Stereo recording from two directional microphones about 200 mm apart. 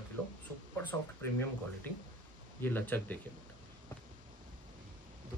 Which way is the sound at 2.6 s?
10° left (ahead or behind).